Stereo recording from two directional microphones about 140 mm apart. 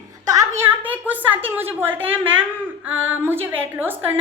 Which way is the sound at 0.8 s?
10° right (ahead or behind).